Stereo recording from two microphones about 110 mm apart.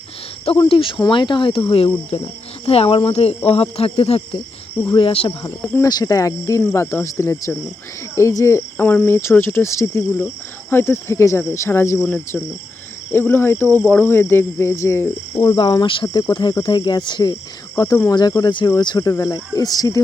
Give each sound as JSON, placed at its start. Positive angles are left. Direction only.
{"t": 0.7, "sound": "speech", "side_deg": 50}
{"t": 5.9, "sound": "speech", "side_deg": 35}
{"t": 6.6, "sound": "speech", "side_deg": 20}
{"t": 15.4, "sound": "speech", "side_deg": 45}